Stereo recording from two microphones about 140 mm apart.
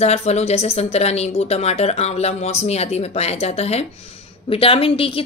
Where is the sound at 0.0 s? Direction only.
50° left (ahead or behind).